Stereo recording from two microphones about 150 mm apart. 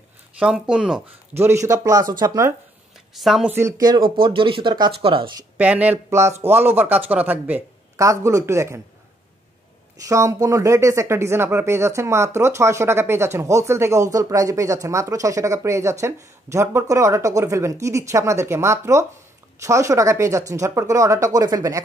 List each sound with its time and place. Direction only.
0.4 s speech: 5° right (ahead or behind)
1.3 s speech: 15° right (ahead or behind)
3.2 s speech: centre (ahead or behind)
3.5 s speech: 20° right (ahead or behind)
4.2 s speech: 35° right (ahead or behind)
5.6 s speech: 10° right (ahead or behind)
10.0 s speech: 20° right (ahead or behind)